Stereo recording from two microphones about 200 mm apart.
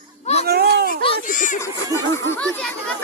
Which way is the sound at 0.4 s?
55° right (ahead or behind).